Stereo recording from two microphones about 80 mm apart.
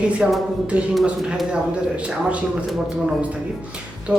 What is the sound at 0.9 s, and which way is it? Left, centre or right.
Speech, centre.